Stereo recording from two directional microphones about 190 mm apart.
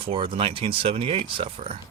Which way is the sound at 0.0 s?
25° right (ahead or behind).